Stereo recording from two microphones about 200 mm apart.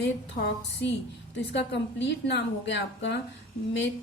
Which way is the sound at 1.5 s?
60° left (ahead or behind).